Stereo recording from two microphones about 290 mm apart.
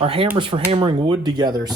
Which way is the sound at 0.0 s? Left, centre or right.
Centre.